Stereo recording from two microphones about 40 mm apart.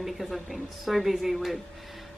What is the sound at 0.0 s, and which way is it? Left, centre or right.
A woman's voice, centre.